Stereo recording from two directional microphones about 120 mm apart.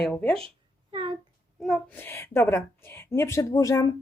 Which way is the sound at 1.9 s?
20° left (ahead or behind).